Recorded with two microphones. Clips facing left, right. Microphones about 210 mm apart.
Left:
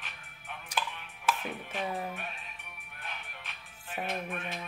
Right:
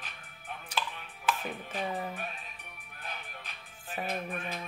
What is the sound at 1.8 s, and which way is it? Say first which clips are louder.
Speech: even; centre (ahead or behind).